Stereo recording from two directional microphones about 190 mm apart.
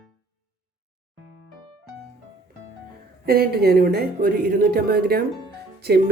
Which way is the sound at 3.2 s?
55° right (ahead or behind).